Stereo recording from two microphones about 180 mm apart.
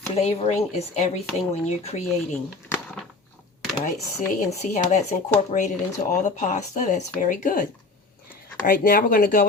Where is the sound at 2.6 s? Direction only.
10° left (ahead or behind).